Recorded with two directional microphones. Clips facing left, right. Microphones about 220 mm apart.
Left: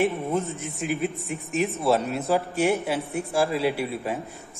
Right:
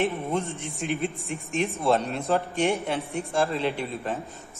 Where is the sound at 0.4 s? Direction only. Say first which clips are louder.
Left 2 dB; 30° right (ahead or behind).